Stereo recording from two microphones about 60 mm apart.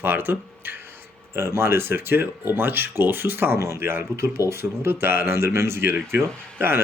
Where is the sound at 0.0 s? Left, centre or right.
Right.